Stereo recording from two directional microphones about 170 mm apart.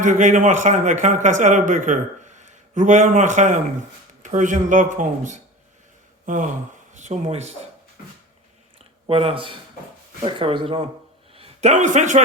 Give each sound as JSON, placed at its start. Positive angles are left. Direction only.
{"t": 0.0, "sound": "a man's voice", "side_deg": -45}
{"t": 9.0, "sound": "speech", "side_deg": -35}
{"t": 11.3, "sound": "a man's voice", "side_deg": -45}